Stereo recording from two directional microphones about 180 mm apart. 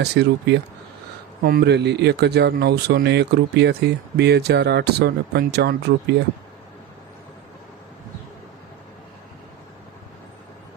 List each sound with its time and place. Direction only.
0.0 s speech: 70° right (ahead or behind)